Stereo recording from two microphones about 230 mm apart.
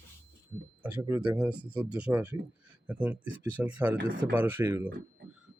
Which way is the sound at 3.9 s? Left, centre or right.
Right.